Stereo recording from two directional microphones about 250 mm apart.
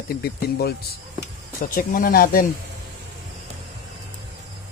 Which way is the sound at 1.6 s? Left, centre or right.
Left.